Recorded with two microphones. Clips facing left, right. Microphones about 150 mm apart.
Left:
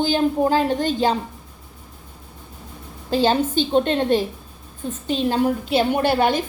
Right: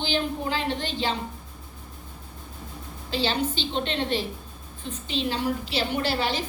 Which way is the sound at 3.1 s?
45° left (ahead or behind).